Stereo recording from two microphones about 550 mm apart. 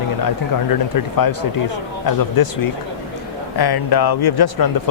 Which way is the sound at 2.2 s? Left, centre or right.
Left.